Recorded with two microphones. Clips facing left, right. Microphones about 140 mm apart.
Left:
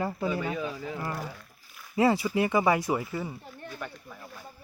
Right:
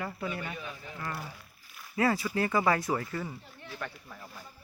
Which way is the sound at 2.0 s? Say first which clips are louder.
Left 4 dB; 25° left (ahead or behind).